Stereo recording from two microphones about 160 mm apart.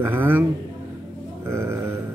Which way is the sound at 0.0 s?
15° right (ahead or behind).